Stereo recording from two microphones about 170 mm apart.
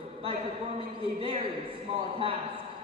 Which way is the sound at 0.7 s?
30° right (ahead or behind).